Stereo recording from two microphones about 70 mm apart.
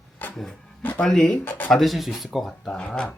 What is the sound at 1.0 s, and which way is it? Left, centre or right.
Speech, centre.